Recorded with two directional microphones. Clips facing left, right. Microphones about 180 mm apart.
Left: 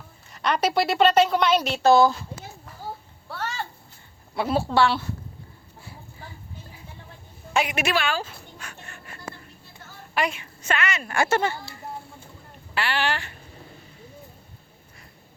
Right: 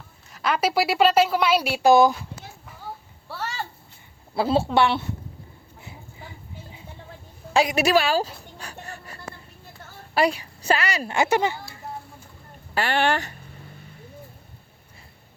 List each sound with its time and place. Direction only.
0.3 s a woman's voice: 5° right (ahead or behind)
4.4 s a woman's voice: 25° right (ahead or behind)
5.8 s a sound: 20° right (ahead or behind)
7.5 s dog: 35° right (ahead or behind)
10.2 s a woman's voice: 35° right (ahead or behind)
11.1 s a woman's voice: 15° right (ahead or behind)
12.7 s speech: 45° right (ahead or behind)